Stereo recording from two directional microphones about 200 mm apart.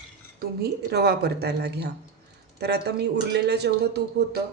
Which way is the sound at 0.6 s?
55° right (ahead or behind).